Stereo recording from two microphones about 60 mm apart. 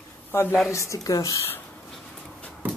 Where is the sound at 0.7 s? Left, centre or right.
Left.